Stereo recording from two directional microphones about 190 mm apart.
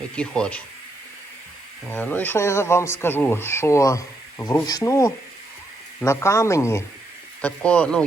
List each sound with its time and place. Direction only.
0.2 s speech: 5° left (ahead or behind)
1.9 s speech: 10° left (ahead or behind)